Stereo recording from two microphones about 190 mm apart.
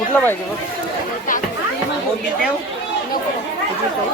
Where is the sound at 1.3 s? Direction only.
45° left (ahead or behind).